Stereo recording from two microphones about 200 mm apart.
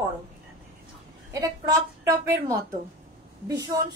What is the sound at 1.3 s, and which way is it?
A woman's voice, 15° right (ahead or behind).